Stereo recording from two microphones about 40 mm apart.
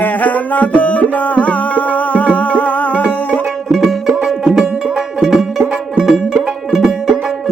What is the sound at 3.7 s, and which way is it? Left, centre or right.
Music, centre.